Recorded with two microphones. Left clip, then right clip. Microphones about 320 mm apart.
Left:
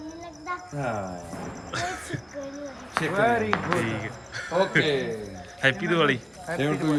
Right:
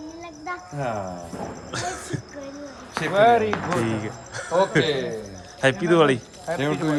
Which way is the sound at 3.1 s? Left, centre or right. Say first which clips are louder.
Right 7 dB; right.